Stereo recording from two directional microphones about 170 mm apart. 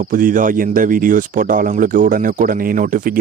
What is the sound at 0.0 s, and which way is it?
Speech, 55° right (ahead or behind).